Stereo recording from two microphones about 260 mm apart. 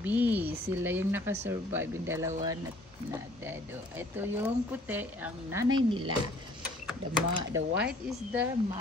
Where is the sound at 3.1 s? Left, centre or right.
Centre.